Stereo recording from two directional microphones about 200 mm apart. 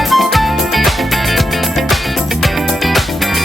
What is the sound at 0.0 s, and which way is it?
Music, centre (ahead or behind).